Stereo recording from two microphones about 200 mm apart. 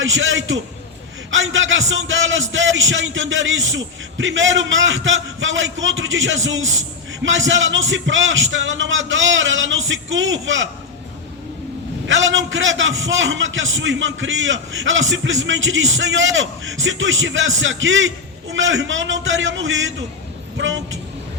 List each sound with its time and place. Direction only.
0.0 s a man's voice: 70° right (ahead or behind)
12.0 s a man's voice: 70° right (ahead or behind)